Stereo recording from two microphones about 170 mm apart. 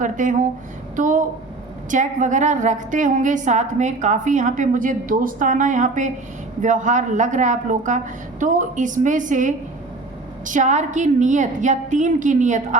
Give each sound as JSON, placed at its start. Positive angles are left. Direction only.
{"t": 0.0, "sound": "a woman's voice", "side_deg": -45}